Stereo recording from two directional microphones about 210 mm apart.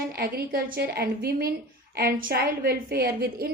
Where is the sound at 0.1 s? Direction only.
45° right (ahead or behind).